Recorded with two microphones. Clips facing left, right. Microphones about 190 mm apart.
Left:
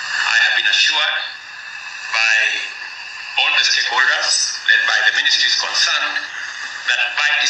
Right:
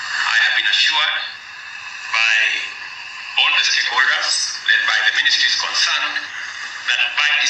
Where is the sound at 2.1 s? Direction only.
40° left (ahead or behind).